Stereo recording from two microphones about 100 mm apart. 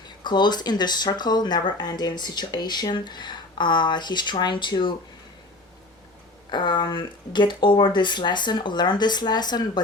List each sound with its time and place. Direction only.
0.2 s speech: 50° left (ahead or behind)
6.5 s speech: 50° left (ahead or behind)